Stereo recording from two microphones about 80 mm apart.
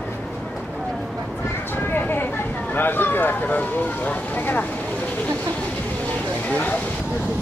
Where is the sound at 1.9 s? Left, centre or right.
Left.